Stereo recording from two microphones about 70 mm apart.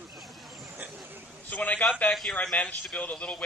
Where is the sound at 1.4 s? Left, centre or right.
Left.